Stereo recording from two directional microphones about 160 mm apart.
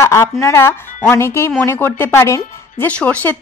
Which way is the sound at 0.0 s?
15° left (ahead or behind).